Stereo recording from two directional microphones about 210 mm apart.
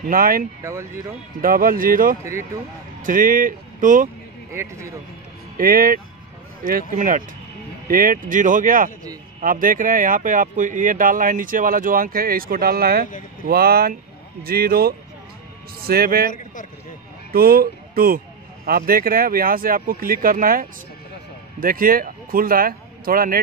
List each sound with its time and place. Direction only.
0.0 s speech: 45° right (ahead or behind)
0.6 s speech: 15° right (ahead or behind)
1.4 s speech: 40° right (ahead or behind)
2.2 s speech: 15° right (ahead or behind)
3.0 s speech: 40° right (ahead or behind)
4.5 s speech: 15° right (ahead or behind)
5.6 s speech: 45° right (ahead or behind)
17.3 s speech: 45° right (ahead or behind)